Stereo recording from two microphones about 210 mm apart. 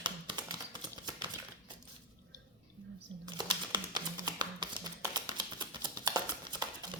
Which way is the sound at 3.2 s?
20° right (ahead or behind).